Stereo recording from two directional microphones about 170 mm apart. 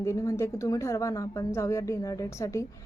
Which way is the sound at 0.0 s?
15° left (ahead or behind).